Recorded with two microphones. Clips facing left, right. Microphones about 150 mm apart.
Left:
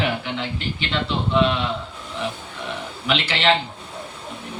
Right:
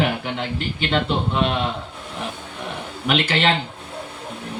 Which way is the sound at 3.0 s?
45° right (ahead or behind).